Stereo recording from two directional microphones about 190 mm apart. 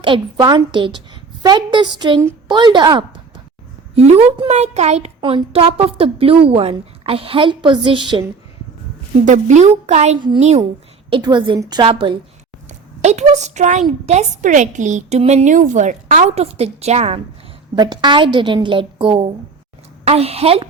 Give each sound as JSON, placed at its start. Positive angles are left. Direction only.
{"t": 0.0, "sound": "a woman's voice", "side_deg": -25}
{"t": 3.9, "sound": "a woman's voice", "side_deg": -35}
{"t": 9.2, "sound": "a woman's voice", "side_deg": -40}
{"t": 10.2, "sound": "a woman's voice", "side_deg": -25}